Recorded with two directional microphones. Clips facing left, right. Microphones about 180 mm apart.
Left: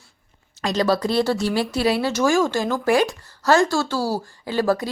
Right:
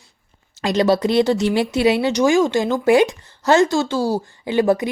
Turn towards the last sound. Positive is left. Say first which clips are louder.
# right 4 dB
turn(degrees=-20)  # may be behind; listen again after turning